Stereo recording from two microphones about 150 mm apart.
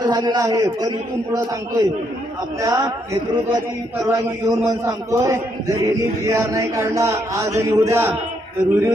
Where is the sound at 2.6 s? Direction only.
25° right (ahead or behind).